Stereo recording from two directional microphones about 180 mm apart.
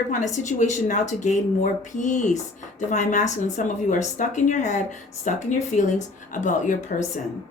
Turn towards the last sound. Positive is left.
turn(degrees=45)  # may be behind; listen again after turning